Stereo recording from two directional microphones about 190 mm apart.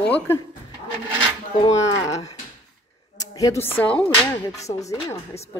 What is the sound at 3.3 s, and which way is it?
Speech, 15° left (ahead or behind).